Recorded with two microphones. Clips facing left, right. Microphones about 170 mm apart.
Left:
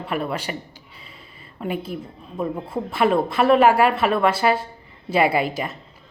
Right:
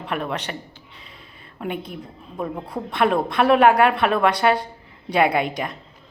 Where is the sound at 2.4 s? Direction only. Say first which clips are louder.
Left 2 dB; centre (ahead or behind).